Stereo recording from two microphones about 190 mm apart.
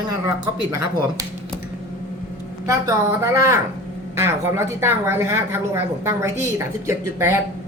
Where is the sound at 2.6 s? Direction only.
15° right (ahead or behind).